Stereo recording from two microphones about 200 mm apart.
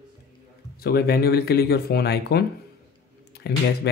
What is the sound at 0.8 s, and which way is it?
Speech, 50° left (ahead or behind).